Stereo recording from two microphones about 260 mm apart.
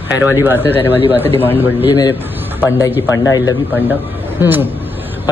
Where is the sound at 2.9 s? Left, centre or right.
Centre.